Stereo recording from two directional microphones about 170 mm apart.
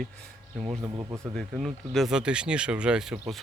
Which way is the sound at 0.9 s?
25° right (ahead or behind).